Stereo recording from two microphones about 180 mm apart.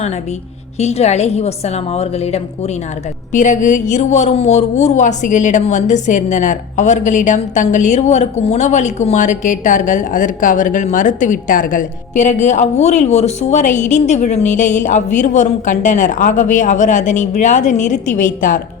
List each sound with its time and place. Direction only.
0.8 s a woman's voice: 35° left (ahead or behind)